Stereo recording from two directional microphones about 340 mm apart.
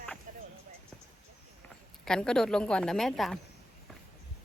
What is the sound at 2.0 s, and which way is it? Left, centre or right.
A woman's voice, centre.